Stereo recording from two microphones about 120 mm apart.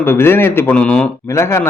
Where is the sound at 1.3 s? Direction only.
20° left (ahead or behind).